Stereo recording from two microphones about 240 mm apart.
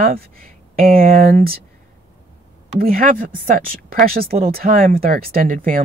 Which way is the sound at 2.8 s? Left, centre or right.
Right.